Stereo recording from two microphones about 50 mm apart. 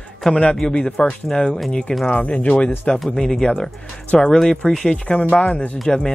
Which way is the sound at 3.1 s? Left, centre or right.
Centre.